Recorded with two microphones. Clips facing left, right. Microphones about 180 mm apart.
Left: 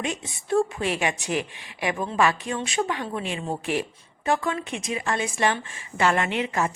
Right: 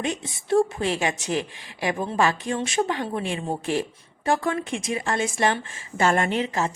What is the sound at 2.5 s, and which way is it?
Speech, 45° right (ahead or behind).